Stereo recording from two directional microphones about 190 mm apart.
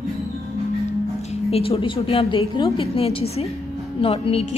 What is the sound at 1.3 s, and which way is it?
A woman's voice, 30° left (ahead or behind).